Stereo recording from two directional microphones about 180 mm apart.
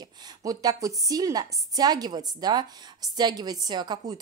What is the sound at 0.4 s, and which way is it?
A woman's voice, 20° right (ahead or behind).